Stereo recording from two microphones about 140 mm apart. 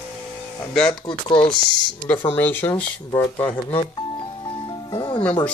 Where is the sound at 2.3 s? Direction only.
15° left (ahead or behind).